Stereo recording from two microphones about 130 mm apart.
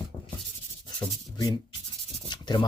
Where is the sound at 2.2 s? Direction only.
35° left (ahead or behind).